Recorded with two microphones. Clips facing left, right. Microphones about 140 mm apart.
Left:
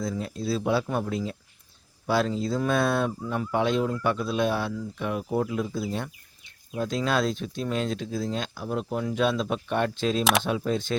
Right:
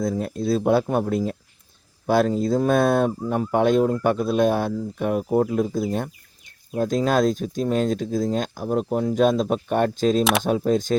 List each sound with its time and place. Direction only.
0.0 s speech: 50° right (ahead or behind)